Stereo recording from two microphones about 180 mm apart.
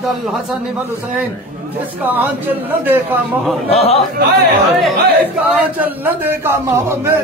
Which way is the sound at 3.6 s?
35° left (ahead or behind).